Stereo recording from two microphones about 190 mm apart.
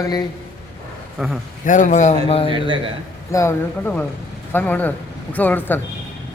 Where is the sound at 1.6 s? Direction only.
40° left (ahead or behind).